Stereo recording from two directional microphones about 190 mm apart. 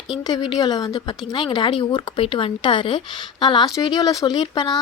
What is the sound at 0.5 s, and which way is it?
Speech, 20° left (ahead or behind).